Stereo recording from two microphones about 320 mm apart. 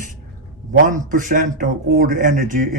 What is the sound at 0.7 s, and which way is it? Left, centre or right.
A man's voice, right.